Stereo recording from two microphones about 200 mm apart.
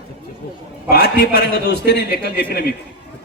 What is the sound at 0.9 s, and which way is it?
A man's voice, 55° left (ahead or behind).